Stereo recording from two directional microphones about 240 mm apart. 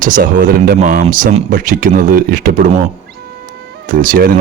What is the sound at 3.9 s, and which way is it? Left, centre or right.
Speech, right.